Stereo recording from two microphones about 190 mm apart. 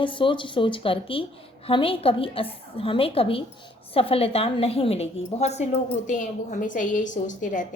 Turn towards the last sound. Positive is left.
turn(degrees=40)  # may be behind; listen again after turning